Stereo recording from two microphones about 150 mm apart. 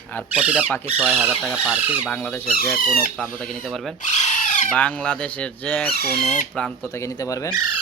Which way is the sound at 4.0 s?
50° left (ahead or behind).